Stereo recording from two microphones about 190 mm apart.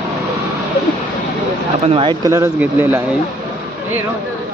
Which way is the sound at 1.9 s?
30° right (ahead or behind).